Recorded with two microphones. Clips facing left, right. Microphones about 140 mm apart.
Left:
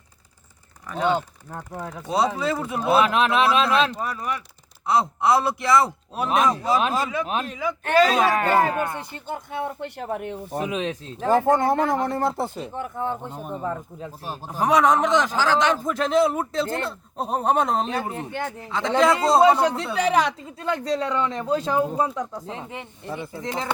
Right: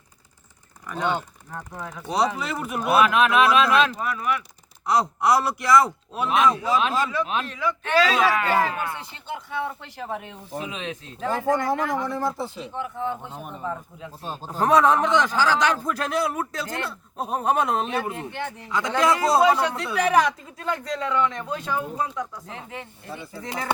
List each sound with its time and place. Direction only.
0.9 s a man's voice: 20° left (ahead or behind); by 10.3 s 55° left (ahead or behind)
10.5 s speech: 45° left (ahead or behind)
12.0 s speech: 60° left (ahead or behind)
12.7 s speech: 45° left (ahead or behind)
14.2 s a man's voice: 10° left (ahead or behind)